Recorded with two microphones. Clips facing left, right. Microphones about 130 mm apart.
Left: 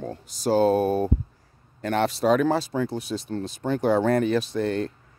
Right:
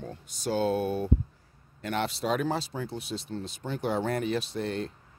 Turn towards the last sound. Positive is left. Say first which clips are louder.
# left 7 dB
turn(degrees=45)  # may be behind; listen again after turning